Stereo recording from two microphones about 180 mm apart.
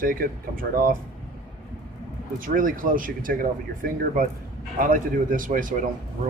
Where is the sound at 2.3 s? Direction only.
50° right (ahead or behind).